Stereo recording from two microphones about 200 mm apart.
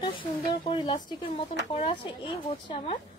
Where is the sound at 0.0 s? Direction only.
25° left (ahead or behind).